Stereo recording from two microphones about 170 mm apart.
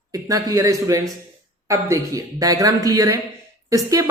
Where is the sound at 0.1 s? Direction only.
20° right (ahead or behind).